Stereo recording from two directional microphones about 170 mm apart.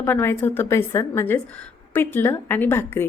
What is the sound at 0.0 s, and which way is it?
A woman's voice, 15° left (ahead or behind).